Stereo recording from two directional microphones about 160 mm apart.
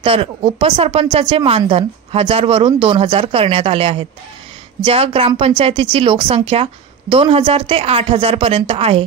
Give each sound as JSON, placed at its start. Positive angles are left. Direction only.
{"t": 0.0, "sound": "a woman's voice", "side_deg": -35}